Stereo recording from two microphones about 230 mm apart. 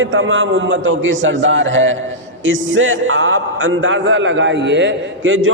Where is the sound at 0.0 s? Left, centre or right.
Right.